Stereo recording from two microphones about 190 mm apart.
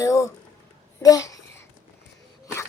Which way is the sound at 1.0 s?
20° left (ahead or behind).